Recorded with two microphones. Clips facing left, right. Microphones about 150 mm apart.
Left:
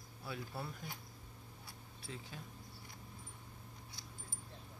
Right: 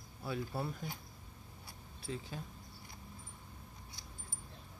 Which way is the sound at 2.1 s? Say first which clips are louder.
Right 7 dB; 30° right (ahead or behind).